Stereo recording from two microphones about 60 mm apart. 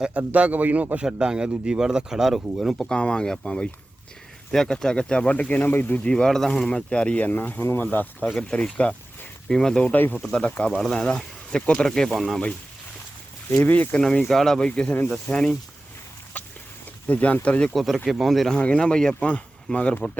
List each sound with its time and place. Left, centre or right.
0.0 s a man's voice: centre
1.0 s speech: centre
2.9 s speech: centre
5.5 s speech: left
6.0 s speech: centre
8.4 s speech: centre
9.8 s speech: left
10.8 s speech: centre
13.7 s speech: left
13.9 s speech: centre
16.4 s a sound: left
17.1 s speech: left
17.7 s speech: centre
18.5 s speech: centre